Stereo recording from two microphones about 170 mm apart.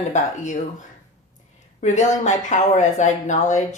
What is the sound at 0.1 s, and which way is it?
Speech, 45° left (ahead or behind).